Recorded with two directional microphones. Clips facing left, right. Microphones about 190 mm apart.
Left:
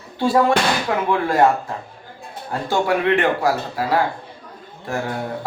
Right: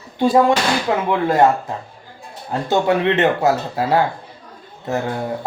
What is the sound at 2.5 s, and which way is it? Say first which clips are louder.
Speech: right 3 dB; 20° right (ahead or behind).